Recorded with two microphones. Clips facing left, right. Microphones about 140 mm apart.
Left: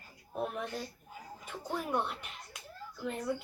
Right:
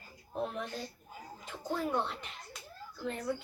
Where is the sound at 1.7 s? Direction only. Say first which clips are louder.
Right 1 dB; 15° left (ahead or behind).